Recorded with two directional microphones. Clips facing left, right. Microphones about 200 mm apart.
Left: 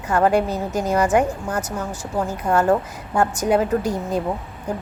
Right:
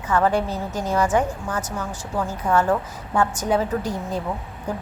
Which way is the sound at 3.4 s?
10° left (ahead or behind).